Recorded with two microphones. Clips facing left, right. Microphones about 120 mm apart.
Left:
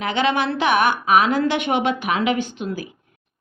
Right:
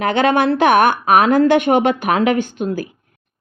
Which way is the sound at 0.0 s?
50° right (ahead or behind).